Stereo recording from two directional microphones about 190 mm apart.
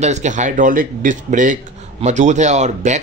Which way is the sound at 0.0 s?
40° right (ahead or behind).